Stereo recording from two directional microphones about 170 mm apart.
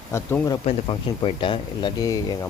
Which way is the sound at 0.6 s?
30° left (ahead or behind).